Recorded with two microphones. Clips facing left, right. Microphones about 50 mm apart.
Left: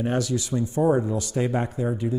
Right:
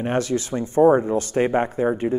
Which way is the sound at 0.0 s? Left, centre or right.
Right.